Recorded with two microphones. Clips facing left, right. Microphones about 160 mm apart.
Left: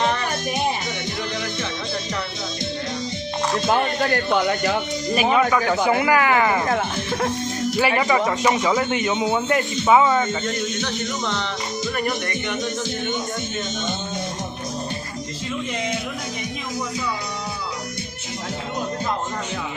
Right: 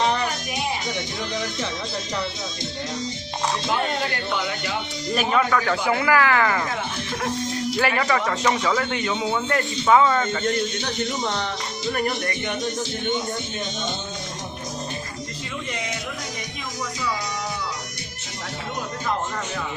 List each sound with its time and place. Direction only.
3.7 s speech: 50° left (ahead or behind)
5.1 s speech: 15° left (ahead or behind)
6.7 s speech: 50° left (ahead or behind)
7.8 s a man's voice: 10° left (ahead or behind)